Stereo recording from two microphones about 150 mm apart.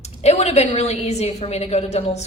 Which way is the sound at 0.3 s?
45° left (ahead or behind).